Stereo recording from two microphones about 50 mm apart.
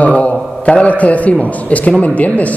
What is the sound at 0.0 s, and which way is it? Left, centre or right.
A man's voice, left.